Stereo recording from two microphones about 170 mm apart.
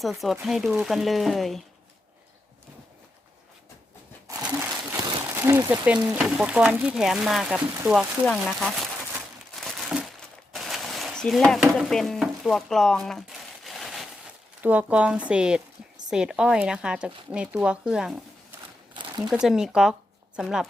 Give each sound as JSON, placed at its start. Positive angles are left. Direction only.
{"t": 0.0, "sound": "speech", "side_deg": 0}
{"t": 4.4, "sound": "speech", "side_deg": -15}
{"t": 9.6, "sound": "crumpling", "side_deg": 0}
{"t": 10.5, "sound": "a sound", "side_deg": 0}
{"t": 14.6, "sound": "speech", "side_deg": -10}
{"t": 18.9, "sound": "a sound", "side_deg": -25}
{"t": 19.3, "sound": "speech", "side_deg": -5}